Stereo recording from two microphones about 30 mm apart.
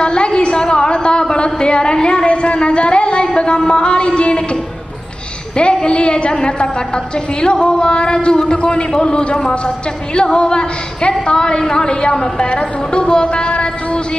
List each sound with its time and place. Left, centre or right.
0.0 s a sound: left
3.3 s a woman's voice: left
5.6 s a woman's voice: left
8.9 s a woman's voice: left